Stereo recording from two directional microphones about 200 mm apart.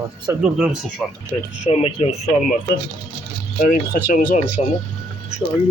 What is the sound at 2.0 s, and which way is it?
Speech, 30° left (ahead or behind).